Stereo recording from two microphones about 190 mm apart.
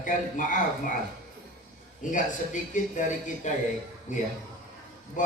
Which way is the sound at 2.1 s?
45° left (ahead or behind).